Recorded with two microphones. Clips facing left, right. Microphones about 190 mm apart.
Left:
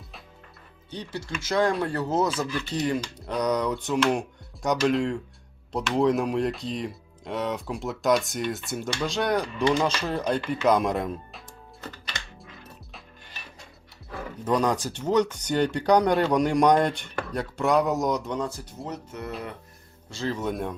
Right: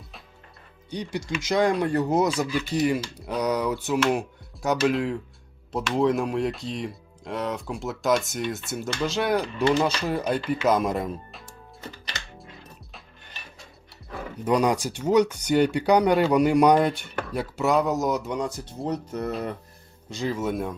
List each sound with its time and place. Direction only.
0.9 s speech: 15° right (ahead or behind)
14.4 s speech: 10° right (ahead or behind)
18.9 s speech: 35° right (ahead or behind)
20.1 s speech: 15° right (ahead or behind)